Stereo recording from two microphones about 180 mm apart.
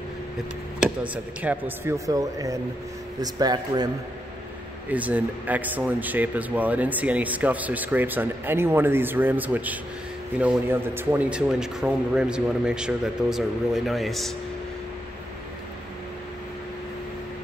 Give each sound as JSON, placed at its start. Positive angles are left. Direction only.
{"t": 0.7, "sound": "speech", "side_deg": -5}
{"t": 2.0, "sound": "speech", "side_deg": -20}
{"t": 4.8, "sound": "speech", "side_deg": -10}